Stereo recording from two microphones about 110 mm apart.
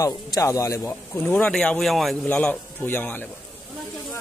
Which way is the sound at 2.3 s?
15° left (ahead or behind).